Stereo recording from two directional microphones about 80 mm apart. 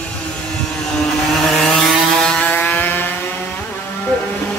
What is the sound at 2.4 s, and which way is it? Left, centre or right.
Chainsaw, centre.